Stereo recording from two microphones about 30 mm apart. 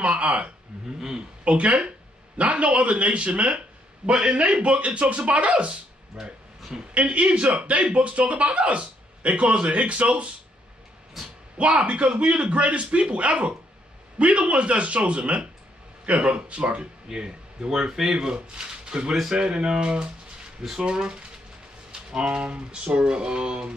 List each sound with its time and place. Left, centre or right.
0.0 s speech: right
4.2 s speech: right
6.2 s speech: centre
6.9 s speech: right
11.2 s speech: centre
11.5 s speech: right
17.1 s speech: right